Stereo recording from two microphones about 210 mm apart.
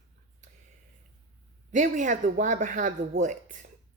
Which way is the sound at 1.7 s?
35° right (ahead or behind).